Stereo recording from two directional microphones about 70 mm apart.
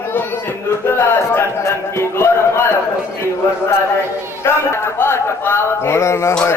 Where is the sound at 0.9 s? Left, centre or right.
Left.